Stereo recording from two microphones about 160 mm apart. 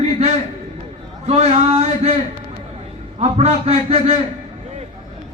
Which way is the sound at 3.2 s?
40° right (ahead or behind).